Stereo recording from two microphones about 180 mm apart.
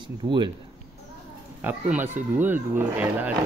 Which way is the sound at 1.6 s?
10° right (ahead or behind).